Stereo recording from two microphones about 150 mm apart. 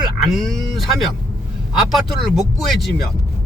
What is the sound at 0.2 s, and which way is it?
Speech, centre (ahead or behind).